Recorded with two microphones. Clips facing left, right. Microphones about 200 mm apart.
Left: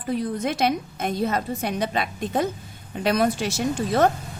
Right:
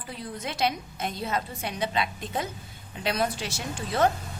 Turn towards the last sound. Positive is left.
turn(degrees=45)  # may be behind; listen again after turning